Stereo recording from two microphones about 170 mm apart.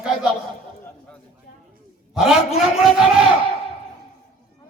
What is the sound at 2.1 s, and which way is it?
Speech, centre (ahead or behind).